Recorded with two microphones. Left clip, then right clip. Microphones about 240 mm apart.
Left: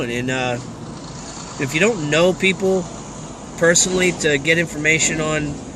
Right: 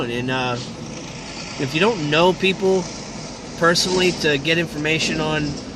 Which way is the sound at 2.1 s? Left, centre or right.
Right.